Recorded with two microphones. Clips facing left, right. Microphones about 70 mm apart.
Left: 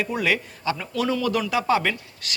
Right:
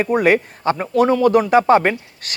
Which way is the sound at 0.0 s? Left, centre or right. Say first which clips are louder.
Right 9 dB; right.